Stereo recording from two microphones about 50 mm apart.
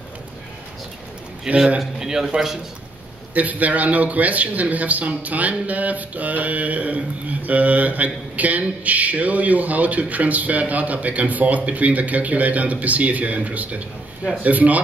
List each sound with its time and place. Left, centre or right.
1.5 s a man's voice: right
3.3 s speech: right